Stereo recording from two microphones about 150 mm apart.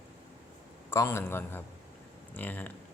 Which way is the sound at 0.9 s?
15° left (ahead or behind).